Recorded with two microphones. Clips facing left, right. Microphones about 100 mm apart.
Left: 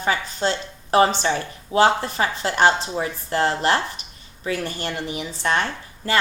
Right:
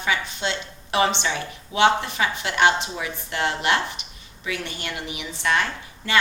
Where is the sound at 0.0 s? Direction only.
40° left (ahead or behind).